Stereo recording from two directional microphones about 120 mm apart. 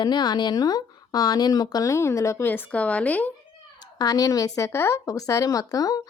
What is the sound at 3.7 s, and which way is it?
Speech, 35° left (ahead or behind).